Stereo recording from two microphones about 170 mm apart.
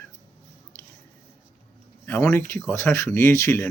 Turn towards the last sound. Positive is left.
turn(degrees=15)  # may be behind; listen again after turning